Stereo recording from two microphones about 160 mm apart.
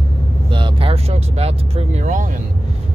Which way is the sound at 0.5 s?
35° right (ahead or behind).